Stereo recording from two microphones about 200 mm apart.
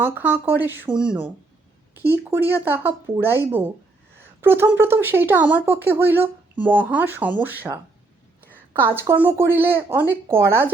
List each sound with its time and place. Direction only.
0.0 s speech: 10° right (ahead or behind)